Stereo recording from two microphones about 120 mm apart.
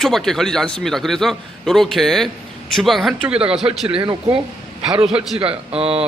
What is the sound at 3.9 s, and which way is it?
Speech, 45° right (ahead or behind).